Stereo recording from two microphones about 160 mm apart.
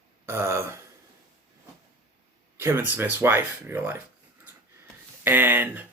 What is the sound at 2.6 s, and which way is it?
Speech, 15° right (ahead or behind).